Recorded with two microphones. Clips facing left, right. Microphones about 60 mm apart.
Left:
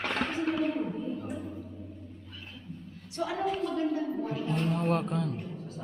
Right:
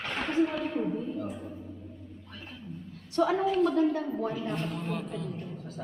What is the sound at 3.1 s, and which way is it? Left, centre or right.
Speech, right.